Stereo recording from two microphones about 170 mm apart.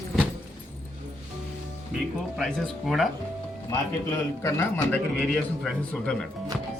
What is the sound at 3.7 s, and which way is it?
Speech, 15° left (ahead or behind).